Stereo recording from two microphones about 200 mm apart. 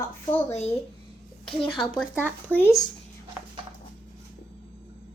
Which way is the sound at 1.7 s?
Centre (ahead or behind).